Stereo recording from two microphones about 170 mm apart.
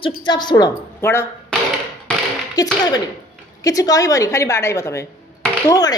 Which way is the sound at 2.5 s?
20° left (ahead or behind).